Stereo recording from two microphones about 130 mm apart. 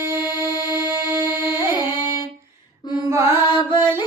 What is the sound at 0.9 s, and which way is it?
Music, 20° right (ahead or behind).